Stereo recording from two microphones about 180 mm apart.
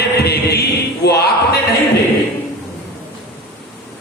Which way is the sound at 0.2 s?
65° left (ahead or behind).